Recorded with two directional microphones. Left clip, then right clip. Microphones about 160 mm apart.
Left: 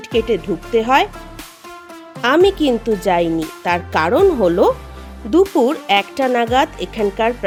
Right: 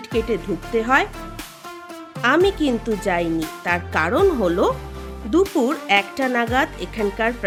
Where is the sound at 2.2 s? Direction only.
35° left (ahead or behind).